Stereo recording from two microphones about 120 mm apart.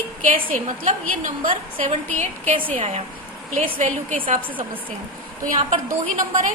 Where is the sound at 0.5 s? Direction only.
90° right.